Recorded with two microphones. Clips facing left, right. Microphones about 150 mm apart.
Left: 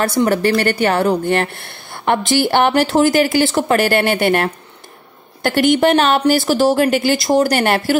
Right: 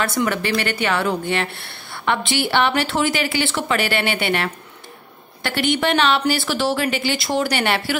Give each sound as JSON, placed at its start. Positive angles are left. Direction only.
{"t": 0.0, "sound": "speech", "side_deg": 35}